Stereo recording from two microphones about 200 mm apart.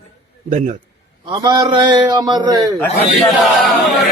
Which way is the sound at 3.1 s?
Centre (ahead or behind).